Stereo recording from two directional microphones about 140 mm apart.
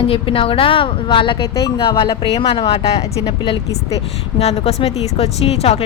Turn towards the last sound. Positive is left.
turn(degrees=50)  # may be behind; listen again after turning